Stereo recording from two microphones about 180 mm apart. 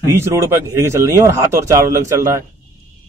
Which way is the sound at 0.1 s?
15° right (ahead or behind).